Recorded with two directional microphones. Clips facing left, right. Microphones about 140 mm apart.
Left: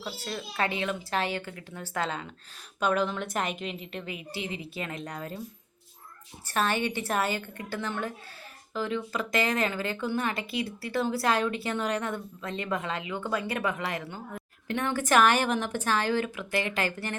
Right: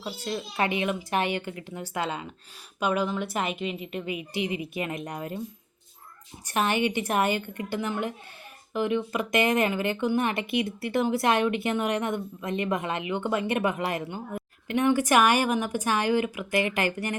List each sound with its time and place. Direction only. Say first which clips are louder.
0.0 s a woman's voice: right 4 dB; 20° right (ahead or behind); by 3.8 s 5° right (ahead or behind)
3.9 s speech: right 6 dB; 15° right (ahead or behind)
6.4 s speech: right 3 dB; 15° right (ahead or behind)